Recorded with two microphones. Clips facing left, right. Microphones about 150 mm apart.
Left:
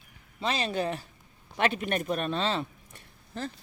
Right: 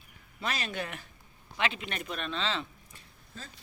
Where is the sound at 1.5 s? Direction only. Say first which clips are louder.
Left 6 dB; 50° left (ahead or behind).